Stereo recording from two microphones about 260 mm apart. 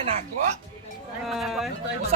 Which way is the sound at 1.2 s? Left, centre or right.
Centre.